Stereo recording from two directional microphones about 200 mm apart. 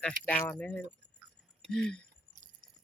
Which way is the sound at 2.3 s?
40° right (ahead or behind).